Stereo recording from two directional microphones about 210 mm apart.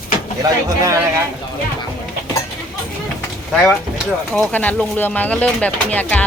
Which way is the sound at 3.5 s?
Centre (ahead or behind).